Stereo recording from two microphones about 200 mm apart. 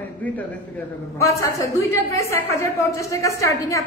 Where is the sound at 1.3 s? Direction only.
15° left (ahead or behind).